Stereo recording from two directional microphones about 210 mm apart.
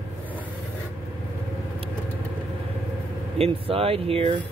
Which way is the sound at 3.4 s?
25° right (ahead or behind).